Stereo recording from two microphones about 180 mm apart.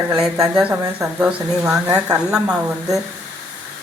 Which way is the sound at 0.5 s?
10° right (ahead or behind).